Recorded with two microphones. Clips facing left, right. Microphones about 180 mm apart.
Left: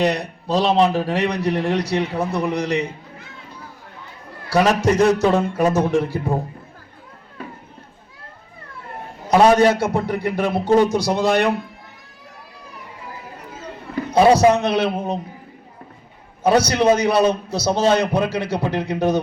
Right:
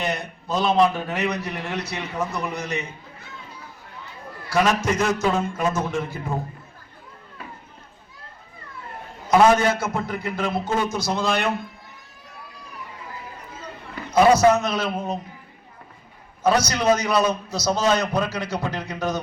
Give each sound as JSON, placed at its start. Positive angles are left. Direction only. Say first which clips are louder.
{"t": 0.0, "sound": "a man's voice", "louder": "left 7 dB", "side_deg": 35}
{"t": 4.4, "sound": "a man's voice", "louder": "left 4 dB", "side_deg": 35}
{"t": 9.3, "sound": "a man's voice", "louder": "left 3 dB", "side_deg": 35}
{"t": 14.1, "sound": "a man's voice", "louder": "left 2 dB", "side_deg": 30}
{"t": 14.6, "sound": "a man's voice", "louder": "left 6 dB", "side_deg": 65}
{"t": 14.8, "sound": "a man's voice", "louder": "left 4 dB", "side_deg": 30}
{"t": 16.4, "sound": "a man's voice", "louder": "left 5 dB", "side_deg": 30}